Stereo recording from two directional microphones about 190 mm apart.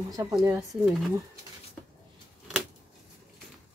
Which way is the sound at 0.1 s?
20° right (ahead or behind).